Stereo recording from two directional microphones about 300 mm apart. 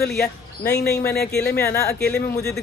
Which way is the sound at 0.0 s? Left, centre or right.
Left.